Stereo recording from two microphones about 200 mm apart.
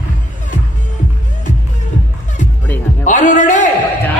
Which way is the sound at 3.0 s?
40° left (ahead or behind).